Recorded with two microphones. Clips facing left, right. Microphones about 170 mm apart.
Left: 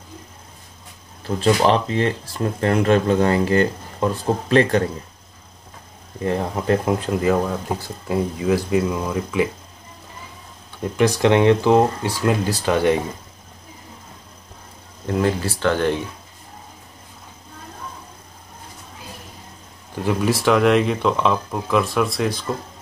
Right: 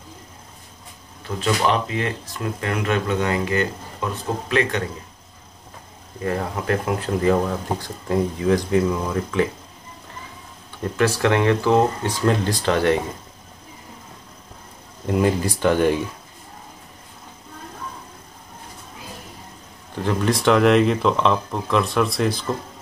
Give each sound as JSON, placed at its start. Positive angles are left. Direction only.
{"t": 1.2, "sound": "speech", "side_deg": 30}
{"t": 6.2, "sound": "speech", "side_deg": 25}
{"t": 7.2, "sound": "speech", "side_deg": 5}
{"t": 10.8, "sound": "speech", "side_deg": 15}
{"t": 15.0, "sound": "speech", "side_deg": -15}
{"t": 20.0, "sound": "speech", "side_deg": 10}